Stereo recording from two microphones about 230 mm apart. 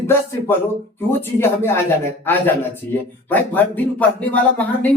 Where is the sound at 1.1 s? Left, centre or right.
Centre.